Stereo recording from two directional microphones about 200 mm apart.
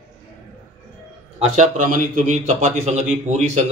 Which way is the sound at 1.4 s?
40° right (ahead or behind).